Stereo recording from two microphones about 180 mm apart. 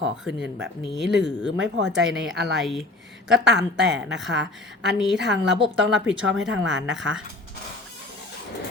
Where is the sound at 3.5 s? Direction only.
80° right.